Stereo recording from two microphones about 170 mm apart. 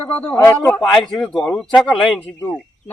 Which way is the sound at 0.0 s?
10° left (ahead or behind).